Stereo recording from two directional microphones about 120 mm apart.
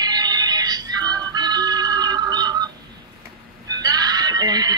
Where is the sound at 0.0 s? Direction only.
35° right (ahead or behind).